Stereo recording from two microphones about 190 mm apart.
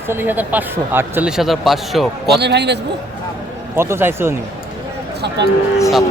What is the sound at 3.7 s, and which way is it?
Speech, 10° right (ahead or behind).